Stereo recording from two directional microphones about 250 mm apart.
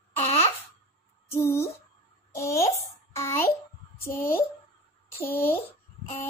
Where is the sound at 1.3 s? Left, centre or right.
Centre.